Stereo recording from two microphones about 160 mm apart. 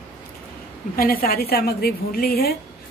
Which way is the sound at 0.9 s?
65° left (ahead or behind).